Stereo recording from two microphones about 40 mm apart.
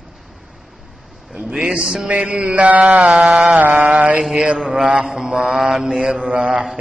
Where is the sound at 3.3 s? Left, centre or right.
Right.